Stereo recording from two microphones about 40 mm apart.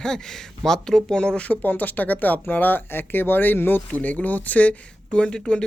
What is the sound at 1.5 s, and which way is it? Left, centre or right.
Speech, left.